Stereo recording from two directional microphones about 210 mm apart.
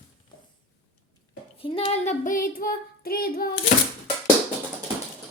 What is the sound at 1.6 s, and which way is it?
Child singing, 25° left (ahead or behind).